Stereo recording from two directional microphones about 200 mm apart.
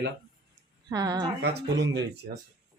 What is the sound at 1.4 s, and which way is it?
Speech, 55° right (ahead or behind).